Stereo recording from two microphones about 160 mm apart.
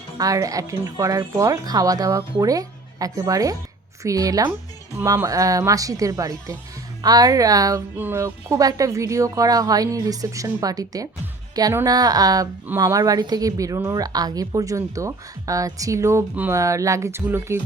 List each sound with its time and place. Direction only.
0.2 s speech: 20° right (ahead or behind)